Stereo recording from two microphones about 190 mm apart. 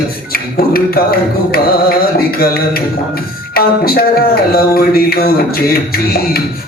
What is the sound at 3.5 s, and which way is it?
Speech, 50° left (ahead or behind).